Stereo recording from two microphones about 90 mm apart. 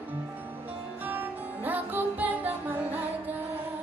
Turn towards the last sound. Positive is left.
turn(degrees=-20)  # may be behind; listen again after turning